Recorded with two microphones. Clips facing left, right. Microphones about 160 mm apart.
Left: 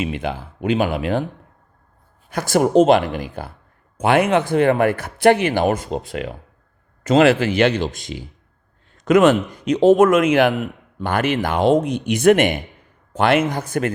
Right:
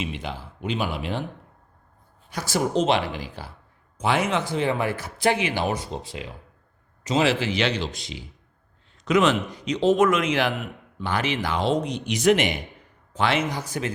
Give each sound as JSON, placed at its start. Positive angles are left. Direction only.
{"t": 0.0, "sound": "a man's voice", "side_deg": 55}
{"t": 2.3, "sound": "a man's voice", "side_deg": 55}